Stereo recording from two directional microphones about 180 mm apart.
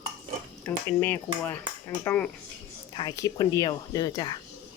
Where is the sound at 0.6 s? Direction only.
10° left (ahead or behind).